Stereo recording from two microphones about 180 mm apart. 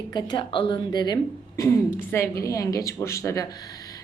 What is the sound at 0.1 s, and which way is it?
Speech, 25° left (ahead or behind).